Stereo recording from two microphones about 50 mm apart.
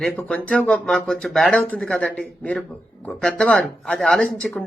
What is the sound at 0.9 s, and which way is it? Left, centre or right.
Speech, centre.